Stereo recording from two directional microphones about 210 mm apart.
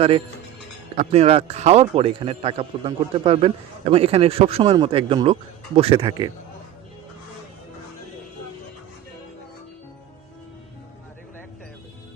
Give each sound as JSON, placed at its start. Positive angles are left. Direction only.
{"t": 0.9, "sound": "a man's voice", "side_deg": -30}